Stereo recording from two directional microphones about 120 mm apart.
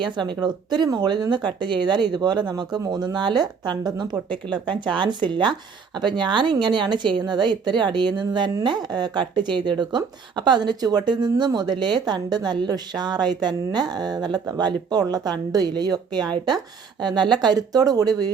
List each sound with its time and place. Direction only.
0.0 s a woman's voice: 40° right (ahead or behind)